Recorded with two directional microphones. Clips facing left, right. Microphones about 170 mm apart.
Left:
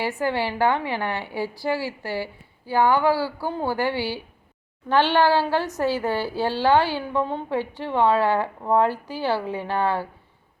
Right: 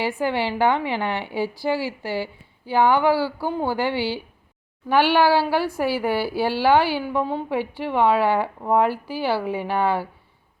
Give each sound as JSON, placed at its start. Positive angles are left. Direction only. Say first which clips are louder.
{"t": 0.2, "sound": "a woman's voice", "louder": "right 1 dB", "side_deg": -20}